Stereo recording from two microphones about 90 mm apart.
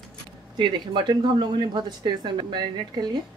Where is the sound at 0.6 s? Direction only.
55° right (ahead or behind).